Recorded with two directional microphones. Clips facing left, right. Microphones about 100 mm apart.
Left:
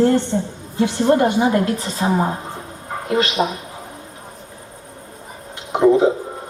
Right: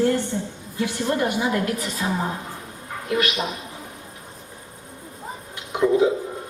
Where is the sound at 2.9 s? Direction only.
40° left (ahead or behind).